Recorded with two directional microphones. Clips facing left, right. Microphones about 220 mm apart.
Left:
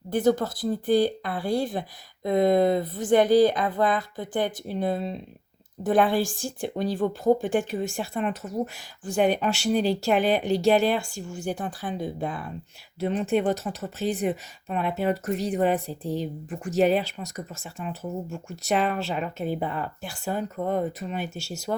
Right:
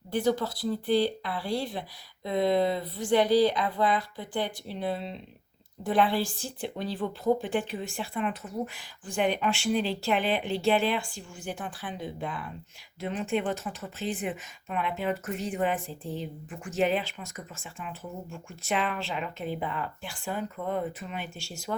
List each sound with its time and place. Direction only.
0.1 s speech: 50° left (ahead or behind)